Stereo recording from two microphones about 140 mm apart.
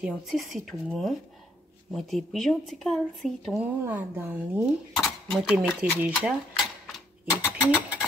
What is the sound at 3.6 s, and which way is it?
Speech, 15° right (ahead or behind).